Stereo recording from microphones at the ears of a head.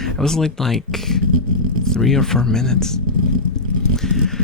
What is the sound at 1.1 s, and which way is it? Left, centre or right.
Speech, left.